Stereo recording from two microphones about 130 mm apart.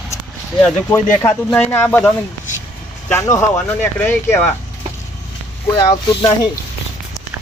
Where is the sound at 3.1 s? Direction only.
25° left (ahead or behind).